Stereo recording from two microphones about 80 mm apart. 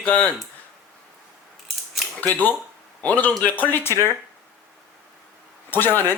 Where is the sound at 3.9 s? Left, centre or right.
Right.